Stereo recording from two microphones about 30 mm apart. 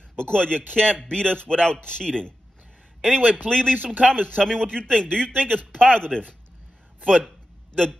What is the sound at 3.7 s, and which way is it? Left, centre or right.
Speech, right.